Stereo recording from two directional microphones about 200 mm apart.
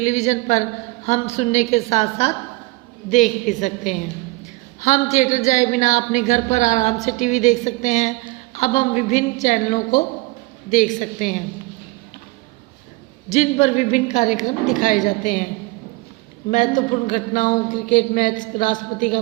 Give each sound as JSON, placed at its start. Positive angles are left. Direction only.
{"t": 0.0, "sound": "a woman's voice", "side_deg": 35}
{"t": 5.1, "sound": "a woman's voice", "side_deg": 35}
{"t": 13.3, "sound": "a woman's voice", "side_deg": 35}
{"t": 16.5, "sound": "a woman's voice", "side_deg": 40}